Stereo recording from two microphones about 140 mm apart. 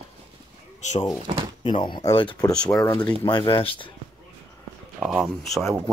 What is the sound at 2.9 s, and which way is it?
Speech, 30° left (ahead or behind).